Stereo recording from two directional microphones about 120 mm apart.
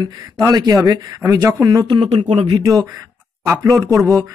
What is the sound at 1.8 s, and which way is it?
Speech, 50° right (ahead or behind).